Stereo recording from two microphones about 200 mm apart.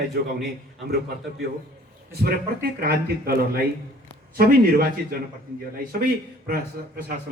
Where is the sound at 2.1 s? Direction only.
50° right (ahead or behind).